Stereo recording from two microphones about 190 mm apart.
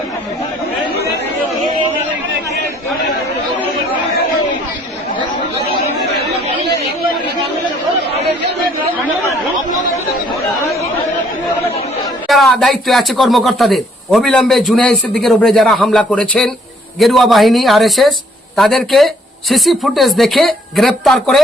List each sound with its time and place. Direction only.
12.3 s speech: centre (ahead or behind)